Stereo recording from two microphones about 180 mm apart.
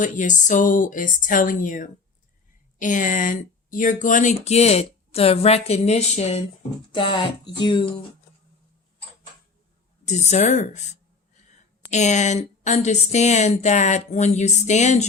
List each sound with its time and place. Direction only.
0.0 s speech: 45° left (ahead or behind); by 7.9 s 25° left (ahead or behind)
10.1 s speech: 40° left (ahead or behind)